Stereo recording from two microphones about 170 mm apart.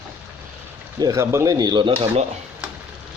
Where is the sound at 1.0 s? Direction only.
15° right (ahead or behind); by 2.3 s 30° right (ahead or behind).